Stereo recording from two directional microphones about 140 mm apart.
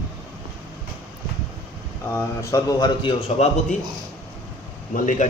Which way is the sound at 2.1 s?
20° left (ahead or behind).